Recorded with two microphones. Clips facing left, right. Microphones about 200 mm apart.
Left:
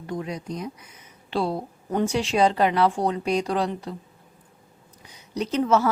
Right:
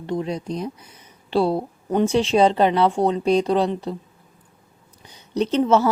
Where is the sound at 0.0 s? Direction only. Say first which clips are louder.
Right 5 dB; 30° right (ahead or behind).